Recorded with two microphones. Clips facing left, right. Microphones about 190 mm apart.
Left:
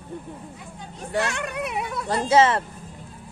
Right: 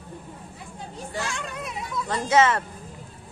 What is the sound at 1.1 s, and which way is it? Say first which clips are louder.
Speech: left 7 dB; 65° left (ahead or behind).